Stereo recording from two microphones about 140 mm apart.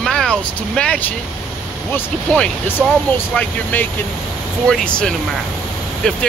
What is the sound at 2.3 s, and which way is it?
Speech, 5° left (ahead or behind).